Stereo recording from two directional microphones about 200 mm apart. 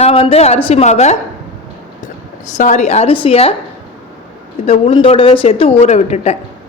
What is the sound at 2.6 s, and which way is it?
Speech, 35° left (ahead or behind).